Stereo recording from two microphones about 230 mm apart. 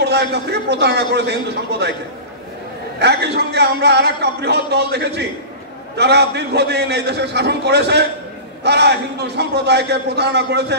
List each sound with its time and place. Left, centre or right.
0.0 s a man's voice: right
3.0 s a man's voice: right